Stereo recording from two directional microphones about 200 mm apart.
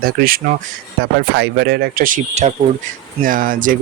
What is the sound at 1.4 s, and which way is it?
Speech, 55° right (ahead or behind).